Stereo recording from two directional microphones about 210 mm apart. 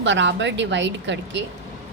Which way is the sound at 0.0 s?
60° right (ahead or behind).